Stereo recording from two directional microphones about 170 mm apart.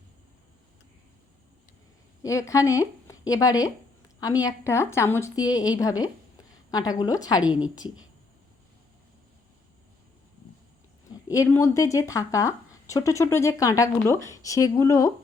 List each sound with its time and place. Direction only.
2.2 s speech: 20° left (ahead or behind)
11.3 s speech: 20° left (ahead or behind)